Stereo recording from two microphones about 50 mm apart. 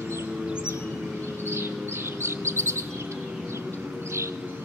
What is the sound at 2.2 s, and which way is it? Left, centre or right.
Bird, right.